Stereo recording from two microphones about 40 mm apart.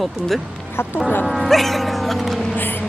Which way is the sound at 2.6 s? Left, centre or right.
Left.